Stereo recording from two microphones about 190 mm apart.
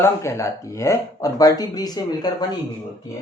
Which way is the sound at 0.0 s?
15° left (ahead or behind).